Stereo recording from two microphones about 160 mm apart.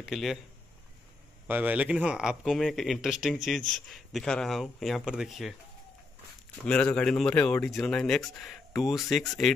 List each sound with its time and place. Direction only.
0.0 s speech: centre (ahead or behind)
1.5 s speech: 10° right (ahead or behind)
6.6 s speech: 5° left (ahead or behind)